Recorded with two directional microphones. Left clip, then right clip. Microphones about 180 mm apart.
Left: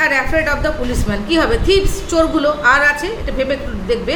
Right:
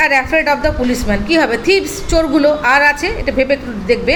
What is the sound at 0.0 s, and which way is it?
A woman's voice, 25° right (ahead or behind).